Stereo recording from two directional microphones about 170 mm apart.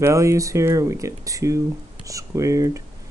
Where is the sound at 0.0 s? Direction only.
20° right (ahead or behind).